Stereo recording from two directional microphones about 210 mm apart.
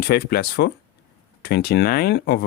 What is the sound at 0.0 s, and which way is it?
Speech, 50° left (ahead or behind).